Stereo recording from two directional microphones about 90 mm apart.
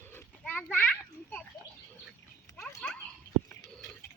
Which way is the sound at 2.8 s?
15° left (ahead or behind).